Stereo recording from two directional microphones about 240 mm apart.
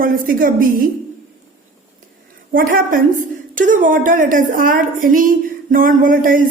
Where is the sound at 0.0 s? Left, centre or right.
Right.